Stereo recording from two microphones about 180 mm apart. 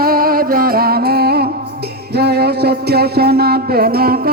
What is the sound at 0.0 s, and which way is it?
Music, 55° right (ahead or behind).